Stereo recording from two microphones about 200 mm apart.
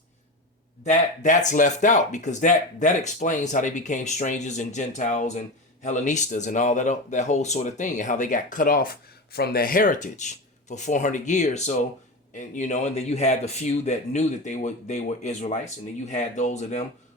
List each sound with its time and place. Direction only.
0.9 s speech: 40° left (ahead or behind)